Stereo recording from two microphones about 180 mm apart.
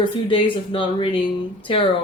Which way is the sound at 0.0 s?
30° left (ahead or behind).